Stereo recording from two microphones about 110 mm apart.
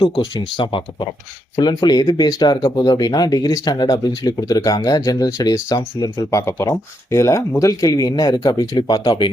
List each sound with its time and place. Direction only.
0.0 s speech: 45° left (ahead or behind)
6.1 s speech: 25° left (ahead or behind); by 9.3 s 50° left (ahead or behind)